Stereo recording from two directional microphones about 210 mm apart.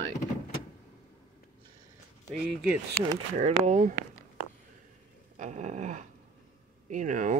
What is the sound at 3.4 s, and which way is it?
Speech, 35° right (ahead or behind).